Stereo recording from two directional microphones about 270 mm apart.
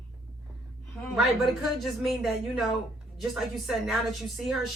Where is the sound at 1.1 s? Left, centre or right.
Centre.